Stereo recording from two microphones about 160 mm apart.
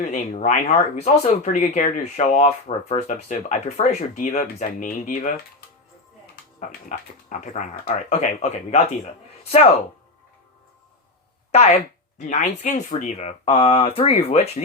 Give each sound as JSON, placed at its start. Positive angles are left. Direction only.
{"t": 0.0, "sound": "speech", "side_deg": 45}
{"t": 6.8, "sound": "speech", "side_deg": 50}
{"t": 11.5, "sound": "speech", "side_deg": 40}